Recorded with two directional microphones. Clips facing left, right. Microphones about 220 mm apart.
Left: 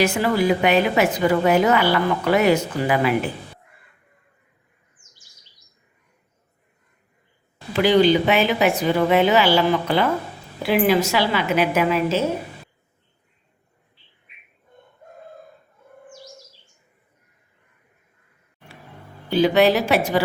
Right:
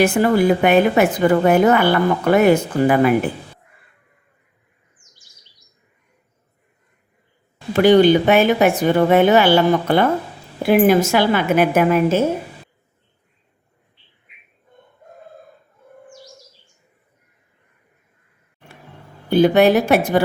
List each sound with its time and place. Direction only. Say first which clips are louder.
0.0 s a woman's voice: right 4 dB; 50° right (ahead or behind)
7.7 s a woman's voice: right 4 dB; 50° right (ahead or behind)
19.3 s a woman's voice: right 4 dB; 50° right (ahead or behind)